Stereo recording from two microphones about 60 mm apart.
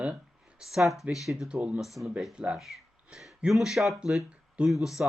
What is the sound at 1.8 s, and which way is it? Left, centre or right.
Speech, centre.